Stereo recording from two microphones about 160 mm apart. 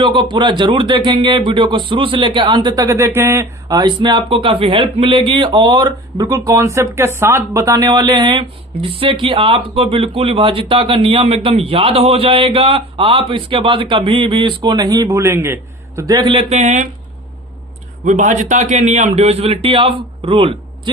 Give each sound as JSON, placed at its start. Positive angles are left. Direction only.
{"t": 0.0, "sound": "speech", "side_deg": -30}
{"t": 18.0, "sound": "speech", "side_deg": -50}